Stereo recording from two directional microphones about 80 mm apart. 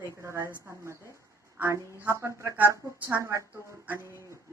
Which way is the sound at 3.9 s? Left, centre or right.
Left.